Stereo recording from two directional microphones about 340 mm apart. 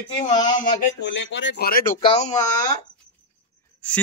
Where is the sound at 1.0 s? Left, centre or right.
Left.